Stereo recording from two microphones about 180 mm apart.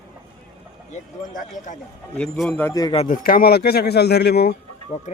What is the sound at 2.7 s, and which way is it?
Speech, 20° left (ahead or behind).